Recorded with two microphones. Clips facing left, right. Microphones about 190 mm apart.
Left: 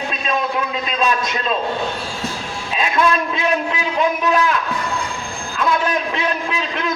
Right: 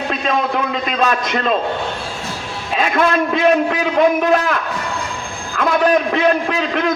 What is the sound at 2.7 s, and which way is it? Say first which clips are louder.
A man's voice: right 2 dB; 55° right (ahead or behind).